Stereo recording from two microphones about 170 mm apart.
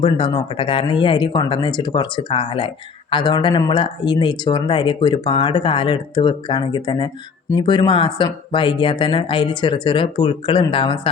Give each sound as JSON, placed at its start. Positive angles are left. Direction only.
{"t": 0.0, "sound": "speech", "side_deg": 30}